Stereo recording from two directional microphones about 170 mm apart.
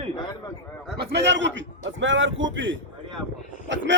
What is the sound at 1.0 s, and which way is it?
A man's voice, 85° right.